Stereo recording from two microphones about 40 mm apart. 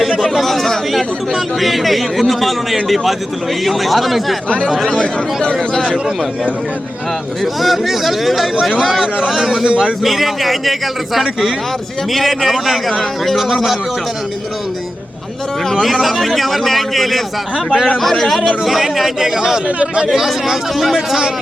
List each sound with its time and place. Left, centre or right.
0.2 s speech: centre
4.4 s speech: left
7.4 s speech: centre
15.7 s speech: centre